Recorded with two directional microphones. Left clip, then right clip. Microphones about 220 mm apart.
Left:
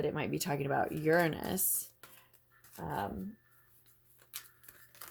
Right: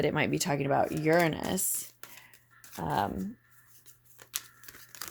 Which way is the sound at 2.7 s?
35° right (ahead or behind).